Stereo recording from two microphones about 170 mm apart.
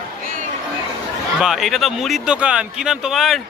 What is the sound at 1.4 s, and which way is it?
Speech, centre (ahead or behind).